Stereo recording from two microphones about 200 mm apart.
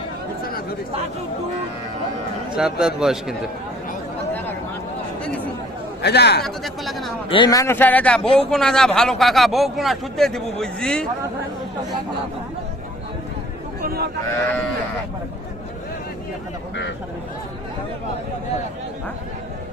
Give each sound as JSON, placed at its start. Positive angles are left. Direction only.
{"t": 0.4, "sound": "chatter", "side_deg": 50}
{"t": 2.6, "sound": "speech", "side_deg": -5}
{"t": 6.0, "sound": "speech", "side_deg": 55}
{"t": 6.4, "sound": "speech", "side_deg": 0}
{"t": 7.3, "sound": "speech", "side_deg": 25}
{"t": 13.8, "sound": "a sound", "side_deg": -50}